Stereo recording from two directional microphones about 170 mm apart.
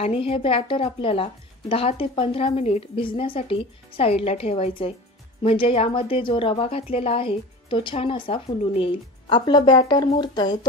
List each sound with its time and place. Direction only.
0.0 s a woman's voice: 35° left (ahead or behind)